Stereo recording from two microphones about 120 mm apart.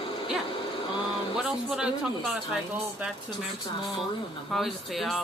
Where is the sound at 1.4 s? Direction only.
5° right (ahead or behind).